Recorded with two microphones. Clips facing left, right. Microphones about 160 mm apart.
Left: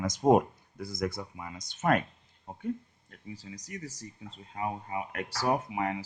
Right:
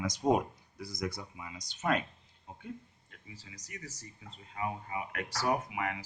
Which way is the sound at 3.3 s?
35° left (ahead or behind).